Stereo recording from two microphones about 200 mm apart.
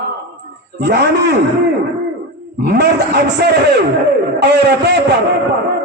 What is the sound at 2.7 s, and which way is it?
A man's voice, 55° right (ahead or behind).